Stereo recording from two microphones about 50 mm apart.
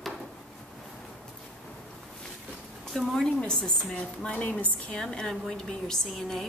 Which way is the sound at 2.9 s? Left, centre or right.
Centre.